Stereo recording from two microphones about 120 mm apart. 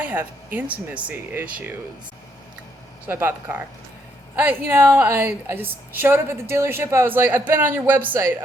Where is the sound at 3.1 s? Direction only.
15° right (ahead or behind).